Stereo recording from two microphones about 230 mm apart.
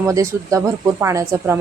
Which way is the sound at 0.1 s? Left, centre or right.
Centre.